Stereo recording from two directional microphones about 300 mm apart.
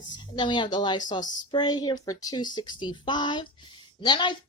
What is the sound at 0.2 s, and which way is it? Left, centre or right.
Speech, centre.